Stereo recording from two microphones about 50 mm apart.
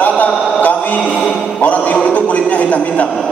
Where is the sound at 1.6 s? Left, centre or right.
Left.